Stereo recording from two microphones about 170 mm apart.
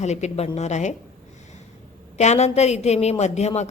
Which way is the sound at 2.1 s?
40° left (ahead or behind).